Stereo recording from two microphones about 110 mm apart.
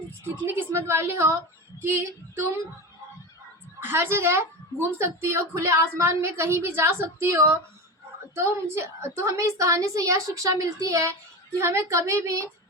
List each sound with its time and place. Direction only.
0.4 s a woman's voice: 25° right (ahead or behind)
3.8 s a woman's voice: 20° right (ahead or behind)
8.6 s a woman's voice: 25° right (ahead or behind)